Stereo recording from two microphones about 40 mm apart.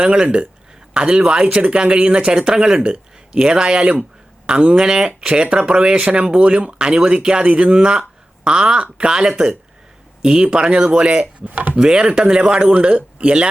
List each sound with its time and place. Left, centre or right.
0.0 s speech: right
11.4 s speech: right
11.8 s speech: right